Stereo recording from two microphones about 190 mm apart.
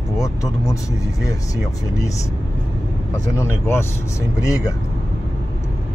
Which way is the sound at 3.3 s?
15° left (ahead or behind).